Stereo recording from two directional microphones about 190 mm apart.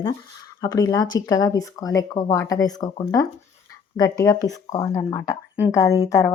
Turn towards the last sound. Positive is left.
turn(degrees=15)  # may be behind; listen again after turning